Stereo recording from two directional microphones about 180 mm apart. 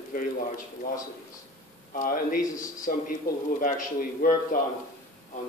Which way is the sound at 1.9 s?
50° left (ahead or behind).